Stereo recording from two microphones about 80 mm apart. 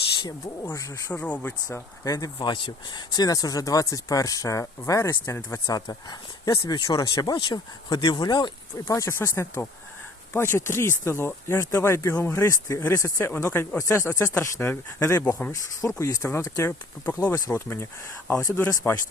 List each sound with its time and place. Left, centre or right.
0.7 s speech: left
1.2 s speech: centre
1.6 s speech: left
2.4 s speech: left
5.7 s speech: left
8.8 s speech: left
12.5 s speech: left
15.5 s speech: left
17.3 s speech: left
18.3 s speech: left